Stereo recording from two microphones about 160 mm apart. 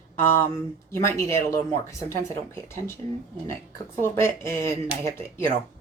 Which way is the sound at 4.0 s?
15° left (ahead or behind).